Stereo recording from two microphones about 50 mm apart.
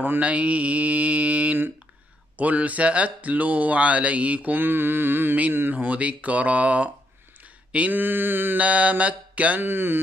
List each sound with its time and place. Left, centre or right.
0.2 s speech: right
2.3 s a sound: right
5.5 s speech: right
7.9 s a sound: right
8.5 s speech: right
9.6 s music: right